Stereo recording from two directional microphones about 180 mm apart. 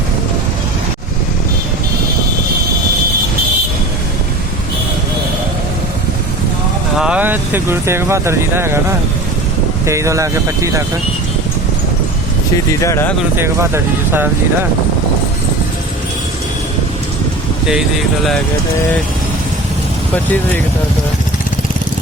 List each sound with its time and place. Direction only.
6.9 s speech: 5° right (ahead or behind)
9.8 s speech: 15° right (ahead or behind)
12.8 s speech: 15° left (ahead or behind)
13.3 s speech: 15° right (ahead or behind)
17.7 s speech: centre (ahead or behind)